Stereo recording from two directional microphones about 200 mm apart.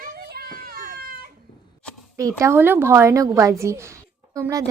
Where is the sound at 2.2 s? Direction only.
15° right (ahead or behind).